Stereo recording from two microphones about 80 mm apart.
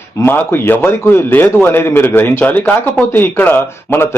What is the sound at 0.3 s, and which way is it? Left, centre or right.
Speech, left.